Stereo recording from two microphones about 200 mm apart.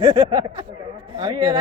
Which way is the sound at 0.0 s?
20° right (ahead or behind).